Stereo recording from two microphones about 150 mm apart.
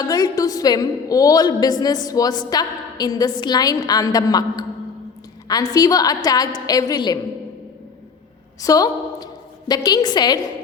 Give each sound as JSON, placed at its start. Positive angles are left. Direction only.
{"t": 0.0, "sound": "a woman's voice", "side_deg": 25}
{"t": 8.6, "sound": "a woman's voice", "side_deg": 25}